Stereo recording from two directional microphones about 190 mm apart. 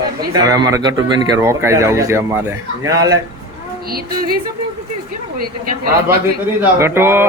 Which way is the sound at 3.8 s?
50° right (ahead or behind).